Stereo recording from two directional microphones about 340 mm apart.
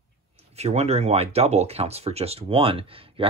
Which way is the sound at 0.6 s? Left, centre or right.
Centre.